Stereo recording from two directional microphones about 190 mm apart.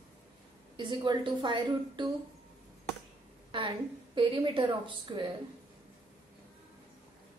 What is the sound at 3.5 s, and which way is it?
A woman's voice, 25° right (ahead or behind).